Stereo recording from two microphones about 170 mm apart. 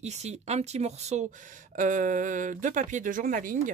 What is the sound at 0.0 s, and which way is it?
Speech, 40° right (ahead or behind).